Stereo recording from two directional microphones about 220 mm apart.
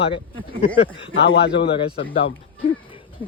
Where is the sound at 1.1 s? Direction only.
55° left (ahead or behind).